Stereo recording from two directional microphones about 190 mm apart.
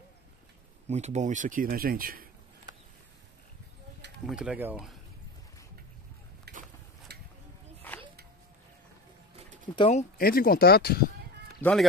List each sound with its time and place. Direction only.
0.8 s speech: 35° right (ahead or behind)
4.3 s speech: 5° right (ahead or behind)
6.5 s a sound: 55° right (ahead or behind)
7.9 s a sound: 10° left (ahead or behind)
9.4 s pigeon: 40° right (ahead or behind)
9.8 s speech: 35° left (ahead or behind)
10.1 s speech: 50° left (ahead or behind)
11.6 s speech: centre (ahead or behind)